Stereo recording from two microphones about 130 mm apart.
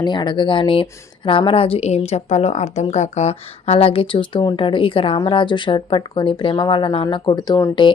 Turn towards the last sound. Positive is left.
turn(degrees=35)  # may be behind; listen again after turning